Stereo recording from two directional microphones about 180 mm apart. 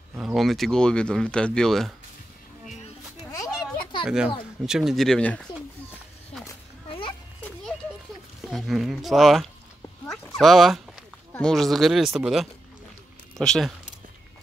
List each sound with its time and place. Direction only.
0.2 s speech: centre (ahead or behind)
3.3 s a sound: 20° left (ahead or behind)
4.0 s speech: 5° right (ahead or behind)
6.9 s a sound: 30° left (ahead or behind)
8.4 s speech: centre (ahead or behind)
10.0 s dog: centre (ahead or behind)
11.3 s speech: centre (ahead or behind)